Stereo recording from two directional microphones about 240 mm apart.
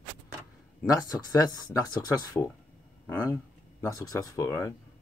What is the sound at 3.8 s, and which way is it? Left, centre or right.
Speech, centre.